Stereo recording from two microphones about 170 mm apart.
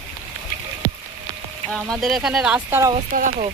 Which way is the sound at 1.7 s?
Centre (ahead or behind).